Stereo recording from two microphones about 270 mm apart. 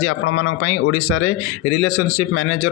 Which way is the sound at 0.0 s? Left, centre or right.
Left.